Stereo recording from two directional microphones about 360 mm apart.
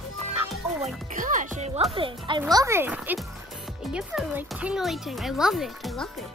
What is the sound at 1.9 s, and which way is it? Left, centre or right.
A child's voice, centre.